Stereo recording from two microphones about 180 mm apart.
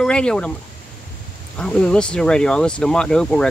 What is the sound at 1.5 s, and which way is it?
Speech, 5° left (ahead or behind).